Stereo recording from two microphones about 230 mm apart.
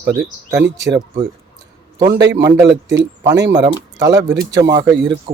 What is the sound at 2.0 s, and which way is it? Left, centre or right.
Speech, centre.